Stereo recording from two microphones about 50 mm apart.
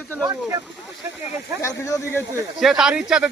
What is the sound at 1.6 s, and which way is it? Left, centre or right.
Speech, left.